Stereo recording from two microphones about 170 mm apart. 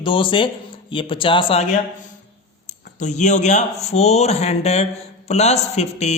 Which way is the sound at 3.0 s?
45° left (ahead or behind).